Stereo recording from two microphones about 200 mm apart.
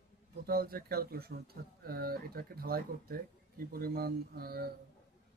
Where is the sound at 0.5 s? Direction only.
50° right (ahead or behind).